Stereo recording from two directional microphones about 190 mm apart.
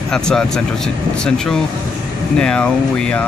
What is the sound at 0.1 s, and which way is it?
Speech, 5° left (ahead or behind).